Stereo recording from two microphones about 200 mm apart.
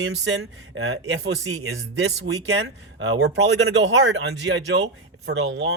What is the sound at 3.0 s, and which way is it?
Speech, 90° right.